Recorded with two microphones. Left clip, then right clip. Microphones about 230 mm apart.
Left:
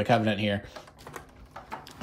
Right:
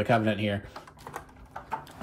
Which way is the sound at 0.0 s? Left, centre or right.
Centre.